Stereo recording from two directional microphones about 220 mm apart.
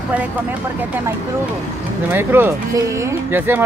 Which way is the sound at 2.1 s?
10° right (ahead or behind).